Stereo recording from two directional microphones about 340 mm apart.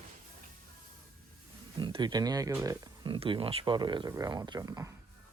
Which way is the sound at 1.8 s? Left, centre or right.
Centre.